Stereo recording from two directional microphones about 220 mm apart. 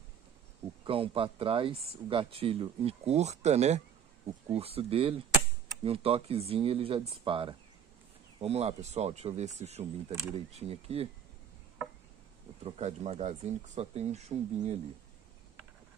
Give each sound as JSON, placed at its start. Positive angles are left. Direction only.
{"t": 0.8, "sound": "speech", "side_deg": -25}
{"t": 12.6, "sound": "speech", "side_deg": -30}